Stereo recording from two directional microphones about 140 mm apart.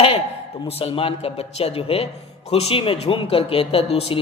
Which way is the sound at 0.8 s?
40° left (ahead or behind).